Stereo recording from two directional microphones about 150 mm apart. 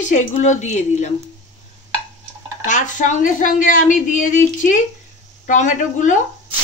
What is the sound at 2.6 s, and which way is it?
Speech, 55° left (ahead or behind).